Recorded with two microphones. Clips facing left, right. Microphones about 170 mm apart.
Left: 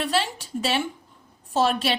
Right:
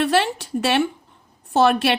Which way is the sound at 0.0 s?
65° right (ahead or behind).